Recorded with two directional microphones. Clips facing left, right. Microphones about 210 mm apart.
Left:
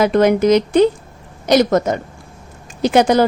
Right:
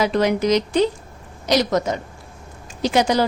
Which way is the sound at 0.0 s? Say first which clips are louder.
Left 6 dB; 55° left (ahead or behind).